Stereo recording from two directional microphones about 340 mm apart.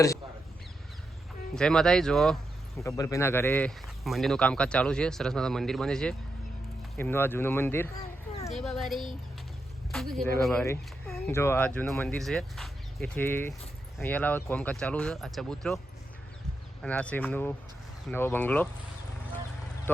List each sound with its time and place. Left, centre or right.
1.5 s speech: centre
10.2 s speech: centre
16.8 s speech: centre